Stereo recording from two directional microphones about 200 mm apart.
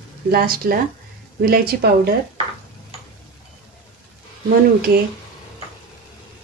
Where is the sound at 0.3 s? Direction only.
50° right (ahead or behind).